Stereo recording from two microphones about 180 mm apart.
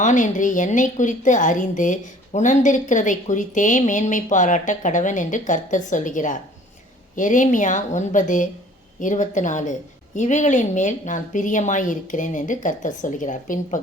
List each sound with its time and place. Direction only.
0.0 s a woman's voice: 45° left (ahead or behind)